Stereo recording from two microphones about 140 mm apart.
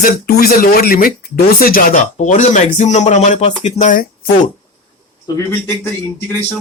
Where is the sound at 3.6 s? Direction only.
65° left (ahead or behind).